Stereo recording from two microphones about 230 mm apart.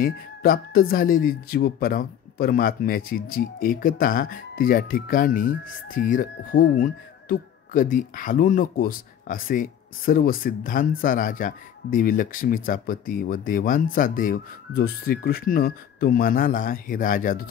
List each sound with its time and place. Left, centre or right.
0.0 s speech: left